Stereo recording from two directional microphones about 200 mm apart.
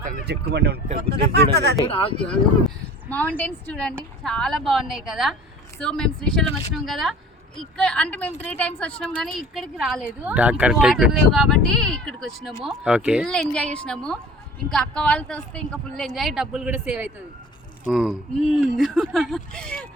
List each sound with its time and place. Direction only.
0.3 s speech: 55° right (ahead or behind)
2.2 s speech: 5° left (ahead or behind)